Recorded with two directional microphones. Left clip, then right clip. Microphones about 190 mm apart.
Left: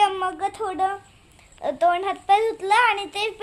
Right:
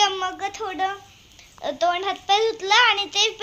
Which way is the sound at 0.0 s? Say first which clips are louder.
Left 1 dB; 10° left (ahead or behind).